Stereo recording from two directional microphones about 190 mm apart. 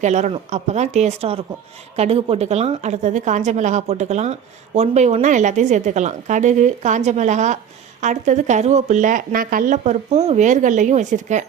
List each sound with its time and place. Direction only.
0.0 s a woman's voice: 35° right (ahead or behind)